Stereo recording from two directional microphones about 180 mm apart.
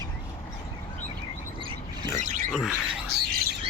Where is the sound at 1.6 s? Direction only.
30° right (ahead or behind).